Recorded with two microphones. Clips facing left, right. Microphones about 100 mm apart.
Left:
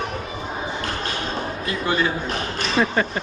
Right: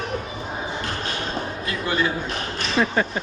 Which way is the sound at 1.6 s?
25° left (ahead or behind).